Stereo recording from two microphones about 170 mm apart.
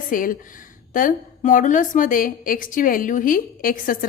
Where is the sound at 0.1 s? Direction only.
55° left (ahead or behind).